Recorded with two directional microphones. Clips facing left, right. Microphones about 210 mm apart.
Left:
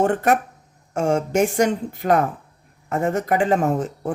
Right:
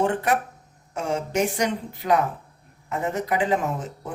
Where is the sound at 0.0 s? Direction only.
45° left (ahead or behind).